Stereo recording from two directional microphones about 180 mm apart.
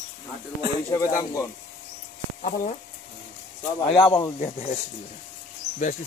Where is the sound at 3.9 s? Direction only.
15° left (ahead or behind).